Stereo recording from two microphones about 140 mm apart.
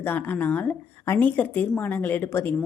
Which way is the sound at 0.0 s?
15° left (ahead or behind).